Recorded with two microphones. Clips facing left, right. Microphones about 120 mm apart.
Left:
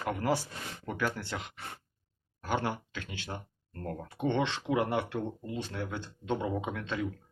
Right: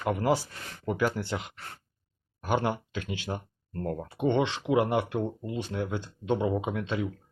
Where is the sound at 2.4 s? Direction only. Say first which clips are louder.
Right 4 dB; 20° right (ahead or behind).